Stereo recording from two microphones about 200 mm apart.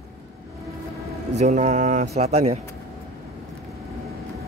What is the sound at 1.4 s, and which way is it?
Speech, 35° right (ahead or behind).